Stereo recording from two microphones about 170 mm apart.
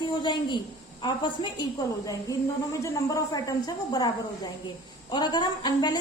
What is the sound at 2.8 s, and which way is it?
A woman's voice, 20° left (ahead or behind).